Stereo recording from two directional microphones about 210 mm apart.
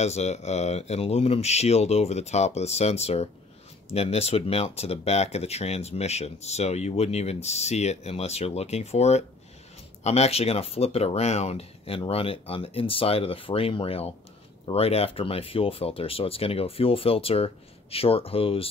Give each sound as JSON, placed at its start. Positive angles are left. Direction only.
{"t": 0.0, "sound": "speech", "side_deg": 30}